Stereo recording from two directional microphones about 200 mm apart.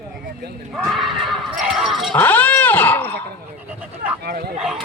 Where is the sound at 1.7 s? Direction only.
Centre (ahead or behind).